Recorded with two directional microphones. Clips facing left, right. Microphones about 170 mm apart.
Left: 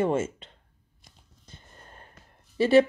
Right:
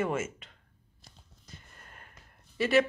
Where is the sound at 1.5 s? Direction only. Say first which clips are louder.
Left 2 dB; 30° left (ahead or behind).